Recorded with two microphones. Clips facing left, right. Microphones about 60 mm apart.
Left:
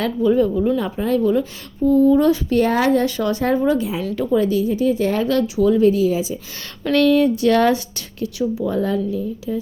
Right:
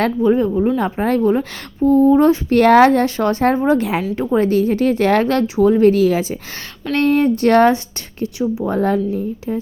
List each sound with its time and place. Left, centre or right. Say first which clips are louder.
0.2 s a woman's voice: left 2 dB; right
2.5 s speech: right 6 dB; right
3.1 s a woman's voice: right 3 dB; right
3.8 s speech: right 4 dB; right
4.1 s a woman's voice: even; right
4.4 s speech: right 3 dB; right
5.8 s speech: right 3 dB; right
6.9 s a woman's voice: even; right
7.7 s a woman's voice: right 1 dB; right
8.7 s a woman's voice: right 3 dB; right